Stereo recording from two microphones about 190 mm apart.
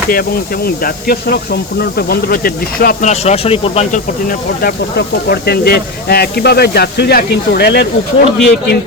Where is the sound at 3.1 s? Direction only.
35° left (ahead or behind); by 7.9 s 60° left (ahead or behind).